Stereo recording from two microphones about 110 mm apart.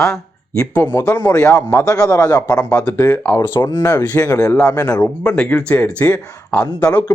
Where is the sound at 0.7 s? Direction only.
20° left (ahead or behind).